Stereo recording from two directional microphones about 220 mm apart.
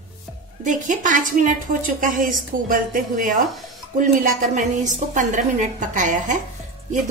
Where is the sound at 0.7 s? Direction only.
35° right (ahead or behind).